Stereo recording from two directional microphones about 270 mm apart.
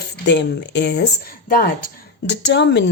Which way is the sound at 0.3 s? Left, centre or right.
Left.